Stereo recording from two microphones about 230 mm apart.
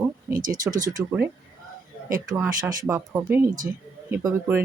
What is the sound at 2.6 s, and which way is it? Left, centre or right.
Speech, centre.